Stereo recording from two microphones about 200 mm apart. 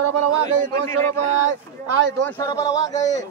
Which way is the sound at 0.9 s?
15° left (ahead or behind).